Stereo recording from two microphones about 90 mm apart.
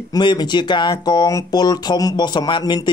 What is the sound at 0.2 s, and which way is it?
Speech, 55° left (ahead or behind).